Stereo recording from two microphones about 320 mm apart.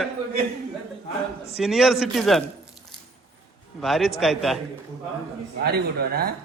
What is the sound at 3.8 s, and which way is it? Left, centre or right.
Speech, centre.